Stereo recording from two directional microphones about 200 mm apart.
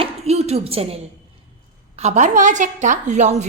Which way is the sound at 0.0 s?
30° right (ahead or behind).